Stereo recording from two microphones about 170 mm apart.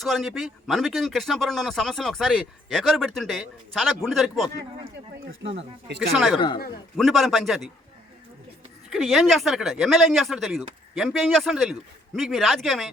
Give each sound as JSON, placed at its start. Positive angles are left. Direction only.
{"t": 0.0, "sound": "speech", "side_deg": 0}
{"t": 5.2, "sound": "speech", "side_deg": -90}
{"t": 6.0, "sound": "speech", "side_deg": 0}
{"t": 8.9, "sound": "speech", "side_deg": 0}